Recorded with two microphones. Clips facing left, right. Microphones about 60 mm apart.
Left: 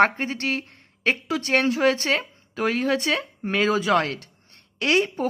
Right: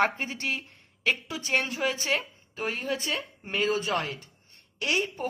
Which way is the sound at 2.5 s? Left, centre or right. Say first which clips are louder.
Left 8 dB; left.